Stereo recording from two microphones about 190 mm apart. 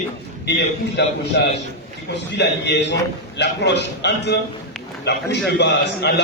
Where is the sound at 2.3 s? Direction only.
65° left (ahead or behind).